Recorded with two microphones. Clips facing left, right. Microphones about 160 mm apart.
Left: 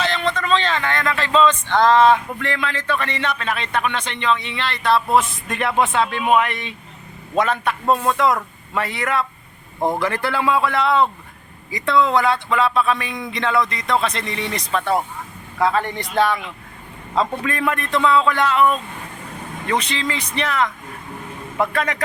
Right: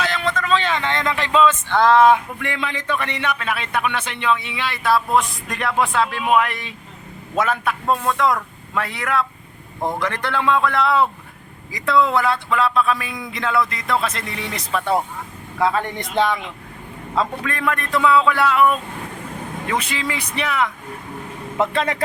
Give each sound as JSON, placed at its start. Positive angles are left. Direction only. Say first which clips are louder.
{"t": 0.0, "sound": "a sound", "louder": "left 1 dB", "side_deg": -5}
{"t": 0.8, "sound": "a man's voice", "louder": "even", "side_deg": -20}
{"t": 15.6, "sound": "speech", "louder": "left 1 dB", "side_deg": -20}
{"t": 17.2, "sound": "a man's voice", "louder": "left 2 dB", "side_deg": 0}
{"t": 21.6, "sound": "speech", "louder": "right 1 dB", "side_deg": -25}